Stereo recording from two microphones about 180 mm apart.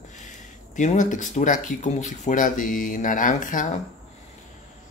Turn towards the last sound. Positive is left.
turn(degrees=45)  # may be behind; listen again after turning